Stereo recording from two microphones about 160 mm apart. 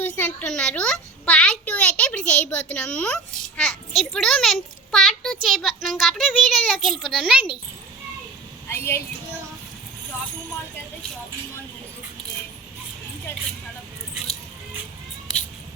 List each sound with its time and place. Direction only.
0.2 s a child's voice: 10° left (ahead or behind)
8.6 s a woman's voice: 15° left (ahead or behind)